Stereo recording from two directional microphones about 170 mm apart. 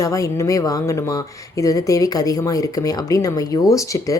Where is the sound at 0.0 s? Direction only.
20° left (ahead or behind).